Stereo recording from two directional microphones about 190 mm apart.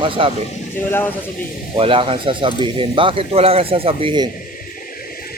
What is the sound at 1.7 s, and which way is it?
Speech, 25° right (ahead or behind).